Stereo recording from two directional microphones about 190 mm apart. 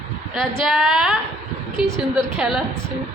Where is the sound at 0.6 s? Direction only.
Centre (ahead or behind).